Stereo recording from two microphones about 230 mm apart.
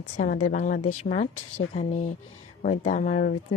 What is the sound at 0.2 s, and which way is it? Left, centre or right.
A woman's voice, left.